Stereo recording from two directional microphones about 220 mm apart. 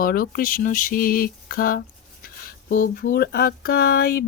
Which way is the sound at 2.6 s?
40° left (ahead or behind).